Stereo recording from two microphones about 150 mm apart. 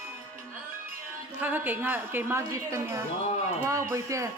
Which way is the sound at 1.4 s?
10° right (ahead or behind).